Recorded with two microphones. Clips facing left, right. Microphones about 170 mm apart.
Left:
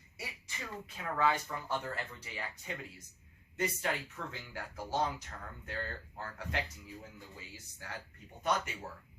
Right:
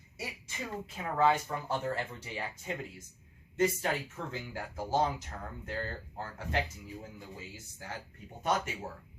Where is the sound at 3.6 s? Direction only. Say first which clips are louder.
Right 5 dB; 25° right (ahead or behind).